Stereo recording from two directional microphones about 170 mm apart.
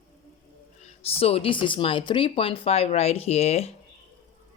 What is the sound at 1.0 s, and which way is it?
A woman's voice, 35° left (ahead or behind).